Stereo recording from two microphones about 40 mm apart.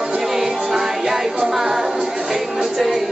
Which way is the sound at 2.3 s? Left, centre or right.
Centre.